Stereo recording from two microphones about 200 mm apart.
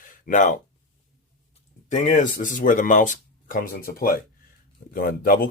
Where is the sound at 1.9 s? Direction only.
35° left (ahead or behind).